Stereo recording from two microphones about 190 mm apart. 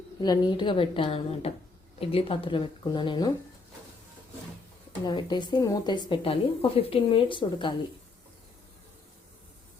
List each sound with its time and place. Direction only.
0.2 s speech: 25° left (ahead or behind)
5.0 s speech: 25° left (ahead or behind)